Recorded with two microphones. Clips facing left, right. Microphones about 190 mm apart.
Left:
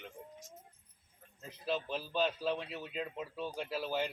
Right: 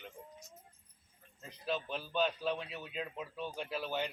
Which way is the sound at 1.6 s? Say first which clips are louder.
Left 1 dB; centre (ahead or behind).